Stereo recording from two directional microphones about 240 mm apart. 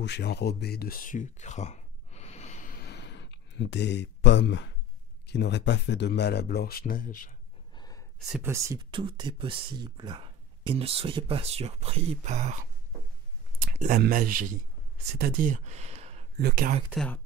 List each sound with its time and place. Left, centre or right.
0.0 s a sound: left
5.2 s speech: left
7.7 s gasp: centre
8.3 s speech: centre; by 16.3 s right
16.3 s speech: right
16.9 s speech: centre